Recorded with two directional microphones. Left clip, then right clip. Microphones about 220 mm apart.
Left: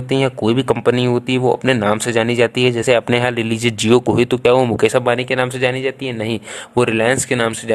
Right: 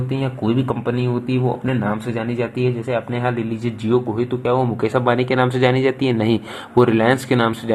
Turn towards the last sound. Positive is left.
turn(degrees=25)  # may be behind; listen again after turning